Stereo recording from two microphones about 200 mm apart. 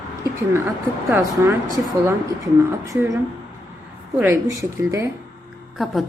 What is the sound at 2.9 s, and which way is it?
Speech, 15° right (ahead or behind).